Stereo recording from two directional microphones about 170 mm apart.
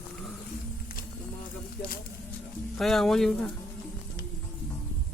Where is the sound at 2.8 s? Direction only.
Centre (ahead or behind).